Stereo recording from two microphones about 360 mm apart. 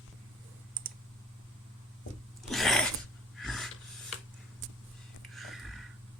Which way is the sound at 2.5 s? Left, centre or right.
Centre.